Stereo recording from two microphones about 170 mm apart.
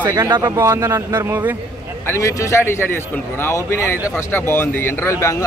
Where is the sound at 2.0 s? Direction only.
15° left (ahead or behind).